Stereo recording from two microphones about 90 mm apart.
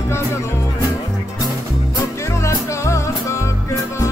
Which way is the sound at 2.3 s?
35° left (ahead or behind).